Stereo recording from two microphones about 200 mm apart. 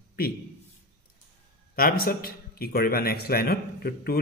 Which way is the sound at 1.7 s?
45° left (ahead or behind).